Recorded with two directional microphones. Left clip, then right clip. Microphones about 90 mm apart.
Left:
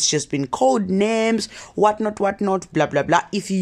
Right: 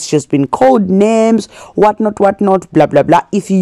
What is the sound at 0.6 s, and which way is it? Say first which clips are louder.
Speech: right 8 dB; 35° right (ahead or behind).